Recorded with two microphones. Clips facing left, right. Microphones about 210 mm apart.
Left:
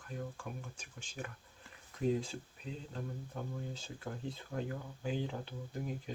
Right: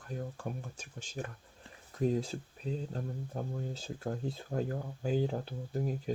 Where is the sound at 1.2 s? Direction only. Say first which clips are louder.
Right 4 dB; 40° right (ahead or behind).